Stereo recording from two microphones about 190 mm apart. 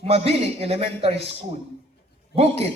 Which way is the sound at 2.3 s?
30° right (ahead or behind).